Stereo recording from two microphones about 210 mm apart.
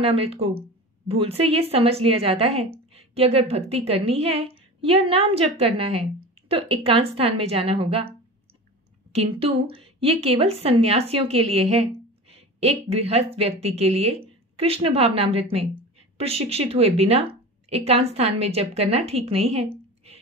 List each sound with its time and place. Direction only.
0.0 s speech: 25° right (ahead or behind)
9.1 s speech: 30° right (ahead or behind)